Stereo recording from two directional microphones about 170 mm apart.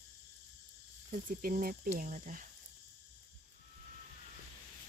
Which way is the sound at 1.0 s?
55° right (ahead or behind).